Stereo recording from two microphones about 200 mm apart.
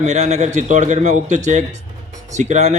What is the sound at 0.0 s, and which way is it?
Speech, 35° right (ahead or behind).